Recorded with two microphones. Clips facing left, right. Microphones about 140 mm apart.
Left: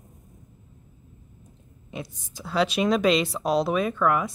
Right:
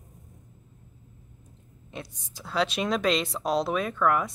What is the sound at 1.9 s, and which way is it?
A woman's voice, 5° left (ahead or behind).